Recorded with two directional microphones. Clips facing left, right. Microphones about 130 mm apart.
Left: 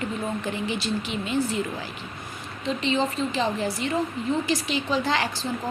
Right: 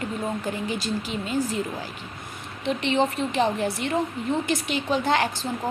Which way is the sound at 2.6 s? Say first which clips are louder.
Right 2 dB; 65° right (ahead or behind).